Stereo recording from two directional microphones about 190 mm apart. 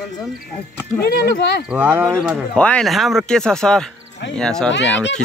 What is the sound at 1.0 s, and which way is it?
Speech, 55° left (ahead or behind).